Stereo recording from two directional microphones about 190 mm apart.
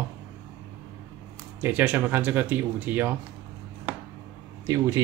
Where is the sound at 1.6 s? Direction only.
10° right (ahead or behind).